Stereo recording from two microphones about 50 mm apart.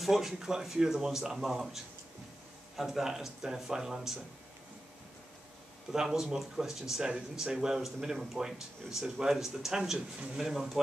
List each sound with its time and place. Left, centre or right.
0.0 s speech: centre
5.9 s speech: centre